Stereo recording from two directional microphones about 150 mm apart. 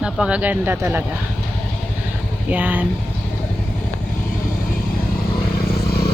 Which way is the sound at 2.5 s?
10° right (ahead or behind).